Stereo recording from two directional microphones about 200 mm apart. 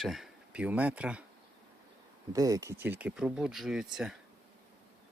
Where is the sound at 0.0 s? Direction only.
Centre (ahead or behind).